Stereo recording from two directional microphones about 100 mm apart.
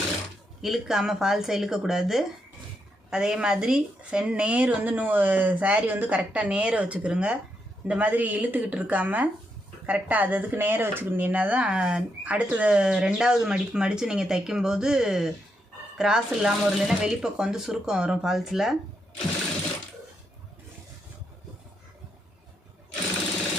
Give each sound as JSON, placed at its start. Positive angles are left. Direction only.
{"t": 0.6, "sound": "speech", "side_deg": -5}